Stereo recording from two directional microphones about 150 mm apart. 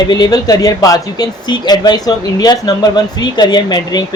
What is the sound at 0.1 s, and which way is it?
Speech, 25° left (ahead or behind).